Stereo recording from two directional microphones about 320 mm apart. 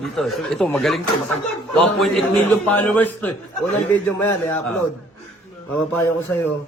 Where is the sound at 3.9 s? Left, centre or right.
Centre.